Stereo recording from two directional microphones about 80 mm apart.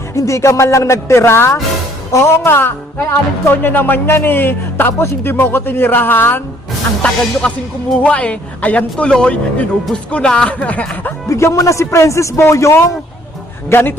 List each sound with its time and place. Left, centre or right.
0.1 s a man's voice: left
7.4 s speech: centre
11.3 s a man's voice: left
13.7 s speech: left